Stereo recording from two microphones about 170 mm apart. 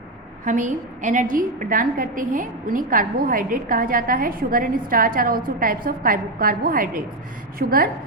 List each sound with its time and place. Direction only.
0.4 s a woman's voice: 50° right (ahead or behind)